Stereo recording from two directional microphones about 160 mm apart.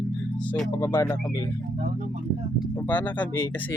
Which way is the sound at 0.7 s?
15° left (ahead or behind).